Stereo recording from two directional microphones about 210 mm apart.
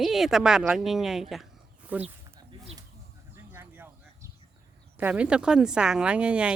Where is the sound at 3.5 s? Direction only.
10° right (ahead or behind).